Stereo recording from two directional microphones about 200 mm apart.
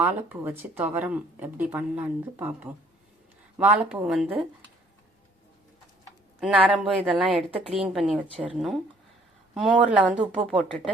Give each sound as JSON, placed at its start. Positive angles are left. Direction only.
{"t": 0.0, "sound": "speech", "side_deg": -10}
{"t": 6.4, "sound": "speech", "side_deg": 0}